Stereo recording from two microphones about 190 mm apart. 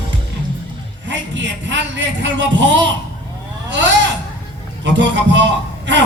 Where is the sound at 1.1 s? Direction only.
70° right (ahead or behind).